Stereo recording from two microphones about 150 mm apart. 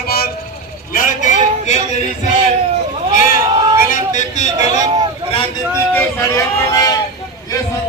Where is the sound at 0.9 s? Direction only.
60° left (ahead or behind).